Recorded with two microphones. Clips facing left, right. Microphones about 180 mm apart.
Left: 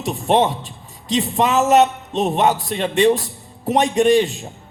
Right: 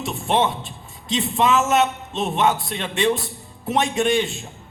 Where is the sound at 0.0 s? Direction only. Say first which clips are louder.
Left 4 dB; 35° left (ahead or behind).